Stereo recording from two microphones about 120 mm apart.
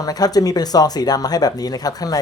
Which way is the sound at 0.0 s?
30° left (ahead or behind).